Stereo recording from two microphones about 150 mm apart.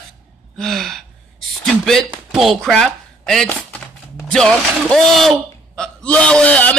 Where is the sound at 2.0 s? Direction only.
Centre (ahead or behind).